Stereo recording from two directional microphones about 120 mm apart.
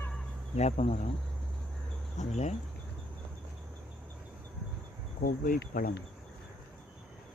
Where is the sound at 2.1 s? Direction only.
75° left (ahead or behind).